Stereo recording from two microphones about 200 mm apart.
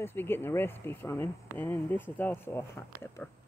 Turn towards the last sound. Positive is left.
turn(degrees=10)  # may be behind; listen again after turning